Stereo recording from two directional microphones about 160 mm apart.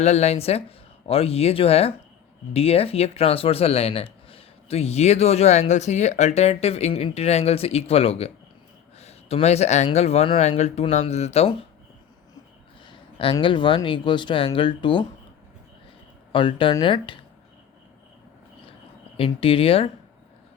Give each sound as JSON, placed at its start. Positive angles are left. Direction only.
{"t": 0.0, "sound": "speech", "side_deg": 45}
{"t": 12.8, "sound": "a sound", "side_deg": 35}
{"t": 13.4, "sound": "speech", "side_deg": 30}
{"t": 16.3, "sound": "speech", "side_deg": 30}
{"t": 19.1, "sound": "speech", "side_deg": 35}